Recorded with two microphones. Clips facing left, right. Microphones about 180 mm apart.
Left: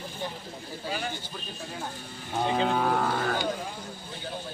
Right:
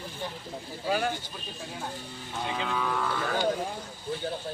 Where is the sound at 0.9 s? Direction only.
50° right (ahead or behind).